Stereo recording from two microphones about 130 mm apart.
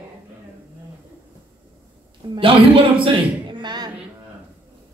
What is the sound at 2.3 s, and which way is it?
A woman's voice, 40° right (ahead or behind).